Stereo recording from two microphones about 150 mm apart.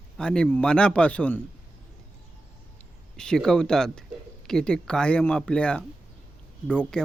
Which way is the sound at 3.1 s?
5° left (ahead or behind).